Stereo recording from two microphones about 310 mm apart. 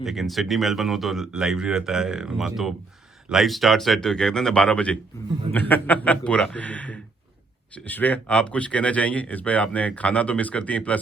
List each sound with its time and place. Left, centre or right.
0.0 s speech: centre